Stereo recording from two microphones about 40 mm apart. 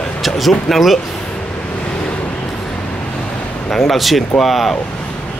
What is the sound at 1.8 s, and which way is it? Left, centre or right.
Vehicle, left.